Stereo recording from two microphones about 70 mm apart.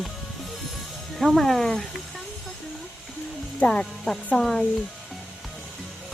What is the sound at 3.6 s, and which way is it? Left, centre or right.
Speech, centre.